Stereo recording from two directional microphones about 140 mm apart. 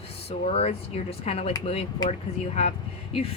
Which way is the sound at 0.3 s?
45° left (ahead or behind).